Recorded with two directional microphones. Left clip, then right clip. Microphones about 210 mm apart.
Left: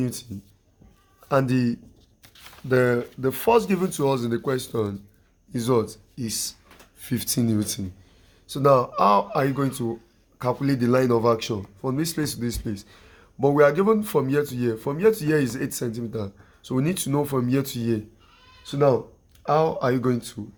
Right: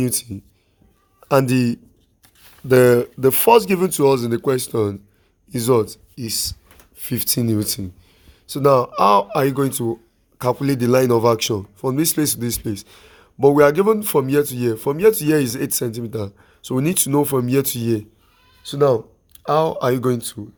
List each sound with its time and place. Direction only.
0.0 s speech: 45° right (ahead or behind)
1.3 s speech: 50° right (ahead or behind)